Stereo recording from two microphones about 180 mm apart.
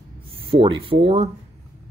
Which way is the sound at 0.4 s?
30° right (ahead or behind).